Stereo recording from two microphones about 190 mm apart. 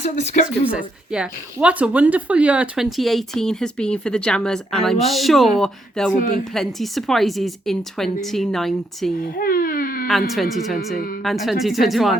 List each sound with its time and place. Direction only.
0.0 s speech: 35° left (ahead or behind)
0.7 s speech: 5° right (ahead or behind)
6.1 s speech: 40° left (ahead or behind)
6.5 s speech: centre (ahead or behind)
9.3 s speech: 50° left (ahead or behind)
10.1 s speech: centre (ahead or behind)